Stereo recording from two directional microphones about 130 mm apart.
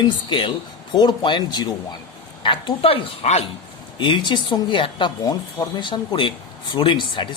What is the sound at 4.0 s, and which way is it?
Speech, 35° left (ahead or behind).